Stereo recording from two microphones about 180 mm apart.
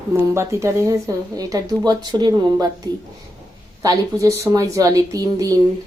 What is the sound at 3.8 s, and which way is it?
A woman's voice, 20° right (ahead or behind).